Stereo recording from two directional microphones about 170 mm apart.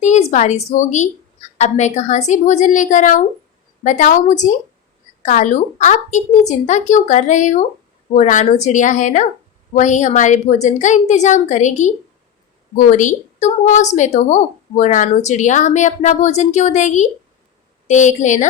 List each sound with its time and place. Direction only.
0.0 s a woman's voice: 45° left (ahead or behind)